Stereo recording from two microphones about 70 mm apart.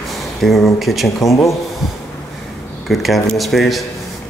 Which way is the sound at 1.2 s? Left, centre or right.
Left.